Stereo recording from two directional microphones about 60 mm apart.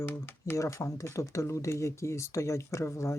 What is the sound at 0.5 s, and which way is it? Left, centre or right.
Speech, left.